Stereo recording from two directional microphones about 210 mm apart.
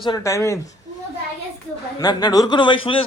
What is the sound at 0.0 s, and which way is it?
Speech, 20° left (ahead or behind).